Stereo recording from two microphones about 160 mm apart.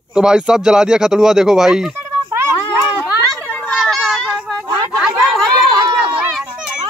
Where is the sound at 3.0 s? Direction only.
10° left (ahead or behind); by 4.7 s 5° right (ahead or behind).